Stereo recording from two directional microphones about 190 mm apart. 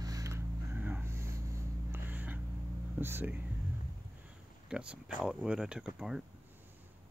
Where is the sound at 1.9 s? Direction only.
10° right (ahead or behind).